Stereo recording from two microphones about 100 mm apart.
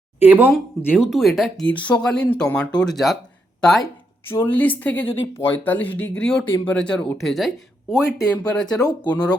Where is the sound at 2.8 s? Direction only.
Centre (ahead or behind).